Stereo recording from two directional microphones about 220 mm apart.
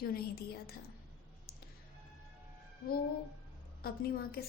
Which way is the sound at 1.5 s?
45° left (ahead or behind).